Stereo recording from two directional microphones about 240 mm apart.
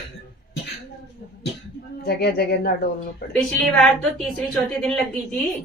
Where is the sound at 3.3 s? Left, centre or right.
Centre.